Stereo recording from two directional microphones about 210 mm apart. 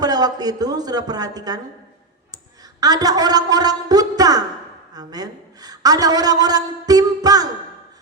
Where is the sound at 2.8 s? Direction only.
20° right (ahead or behind).